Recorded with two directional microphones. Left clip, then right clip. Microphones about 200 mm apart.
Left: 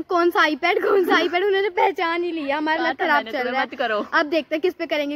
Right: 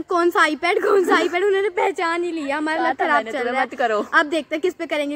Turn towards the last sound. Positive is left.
turn(degrees=25)  # may be behind; listen again after turning